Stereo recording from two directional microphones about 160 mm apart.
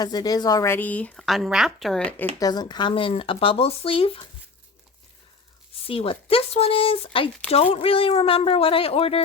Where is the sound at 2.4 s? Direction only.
25° left (ahead or behind).